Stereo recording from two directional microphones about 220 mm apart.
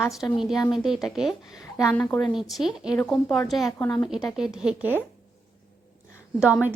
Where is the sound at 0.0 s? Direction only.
Centre (ahead or behind).